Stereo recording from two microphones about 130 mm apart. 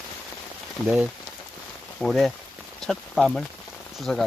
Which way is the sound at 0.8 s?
15° left (ahead or behind).